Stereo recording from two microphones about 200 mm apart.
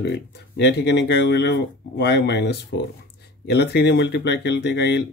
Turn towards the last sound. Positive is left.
turn(degrees=55)  # may be behind; listen again after turning